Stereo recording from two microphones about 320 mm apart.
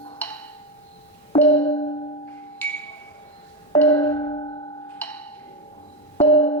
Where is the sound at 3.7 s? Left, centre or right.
Centre.